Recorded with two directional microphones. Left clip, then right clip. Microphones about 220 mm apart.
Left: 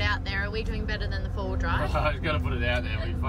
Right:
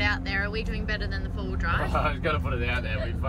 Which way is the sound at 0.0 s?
5° left (ahead or behind).